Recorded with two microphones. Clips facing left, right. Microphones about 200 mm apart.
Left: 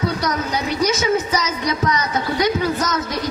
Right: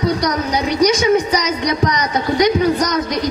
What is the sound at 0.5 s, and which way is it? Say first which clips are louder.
A woman's voice: right 7 dB; 15° right (ahead or behind).